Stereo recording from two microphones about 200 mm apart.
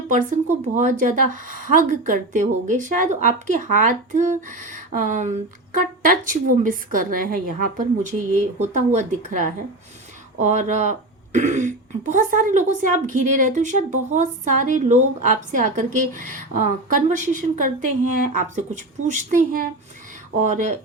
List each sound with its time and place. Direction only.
0.1 s speech: 40° right (ahead or behind)